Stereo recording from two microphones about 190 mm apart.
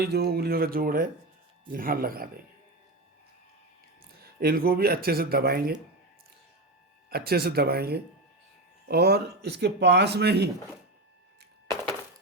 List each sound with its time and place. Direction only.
0.0 s speech: 55° right (ahead or behind)
4.2 s speech: 50° right (ahead or behind)
7.1 s speech: 55° right (ahead or behind)